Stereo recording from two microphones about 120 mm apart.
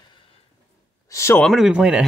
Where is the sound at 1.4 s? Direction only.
Centre (ahead or behind).